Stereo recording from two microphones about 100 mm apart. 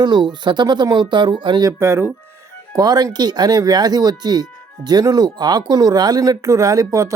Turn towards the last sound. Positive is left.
turn(degrees=-35)  # may be behind; listen again after turning